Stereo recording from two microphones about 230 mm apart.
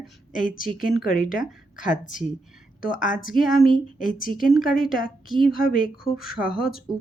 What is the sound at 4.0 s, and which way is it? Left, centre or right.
A woman's voice, left.